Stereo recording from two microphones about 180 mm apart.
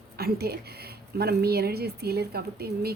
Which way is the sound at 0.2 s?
60° right (ahead or behind).